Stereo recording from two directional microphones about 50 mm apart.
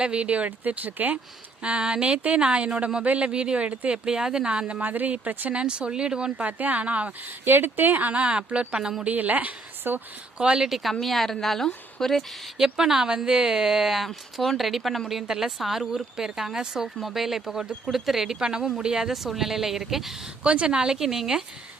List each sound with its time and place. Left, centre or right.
0.0 s speech: right
1.6 s a woman's voice: right
4.5 s speech: right
4.8 s speech: right
5.5 s speech: right
7.4 s speech: right; by 9.0 s centre
9.0 s speech: right
10.3 s a woman's voice: centre
11.0 s a woman's voice: centre
12.5 s a woman's voice: centre
20.4 s a woman's voice: right